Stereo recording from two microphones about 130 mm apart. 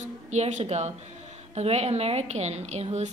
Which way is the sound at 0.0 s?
65° right (ahead or behind).